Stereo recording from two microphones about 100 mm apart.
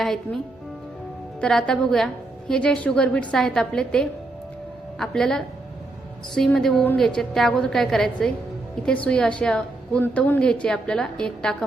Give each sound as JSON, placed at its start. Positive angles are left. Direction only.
{"t": 0.0, "sound": "a woman's voice", "side_deg": 5}
{"t": 1.4, "sound": "a woman's voice", "side_deg": 5}
{"t": 10.0, "sound": "a woman's voice", "side_deg": 20}
{"t": 10.4, "sound": "a woman's voice", "side_deg": 10}